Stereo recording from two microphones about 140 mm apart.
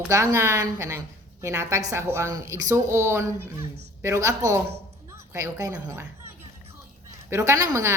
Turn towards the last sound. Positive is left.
turn(degrees=-25)  # may be behind; listen again after turning